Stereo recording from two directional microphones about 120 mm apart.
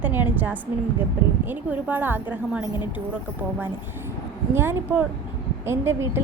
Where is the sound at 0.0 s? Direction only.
15° right (ahead or behind).